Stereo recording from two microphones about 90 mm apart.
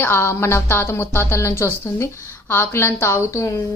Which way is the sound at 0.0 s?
25° left (ahead or behind).